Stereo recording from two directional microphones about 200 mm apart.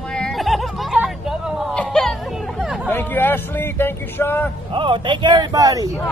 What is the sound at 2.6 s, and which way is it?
Chatter, 5° right (ahead or behind).